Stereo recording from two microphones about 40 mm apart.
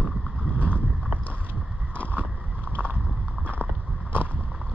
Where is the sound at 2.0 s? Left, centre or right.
Right.